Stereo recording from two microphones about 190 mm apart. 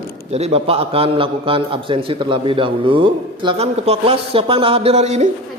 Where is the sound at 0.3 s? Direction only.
35° right (ahead or behind).